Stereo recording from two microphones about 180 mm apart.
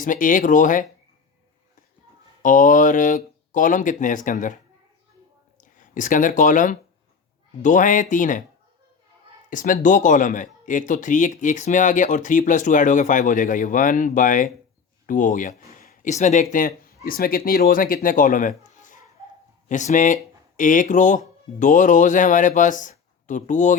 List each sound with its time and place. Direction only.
0.0 s speech: 50° left (ahead or behind)
2.4 s speech: 45° left (ahead or behind)
5.5 s speech: 45° left (ahead or behind)
9.5 s speech: 45° left (ahead or behind)
15.0 s a sound: 45° left (ahead or behind)
16.1 s speech: 40° left (ahead or behind)